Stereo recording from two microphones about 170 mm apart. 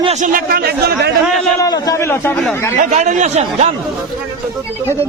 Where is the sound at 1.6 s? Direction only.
20° left (ahead or behind).